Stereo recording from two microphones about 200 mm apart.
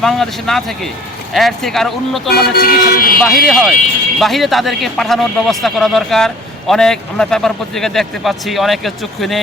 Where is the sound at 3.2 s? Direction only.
Centre (ahead or behind).